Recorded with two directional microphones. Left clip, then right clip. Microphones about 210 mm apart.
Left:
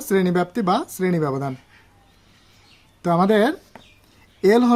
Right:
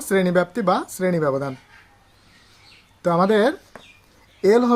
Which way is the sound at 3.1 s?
40° left (ahead or behind).